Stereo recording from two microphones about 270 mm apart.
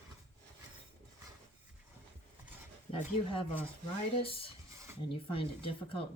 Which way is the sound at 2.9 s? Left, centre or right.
Centre.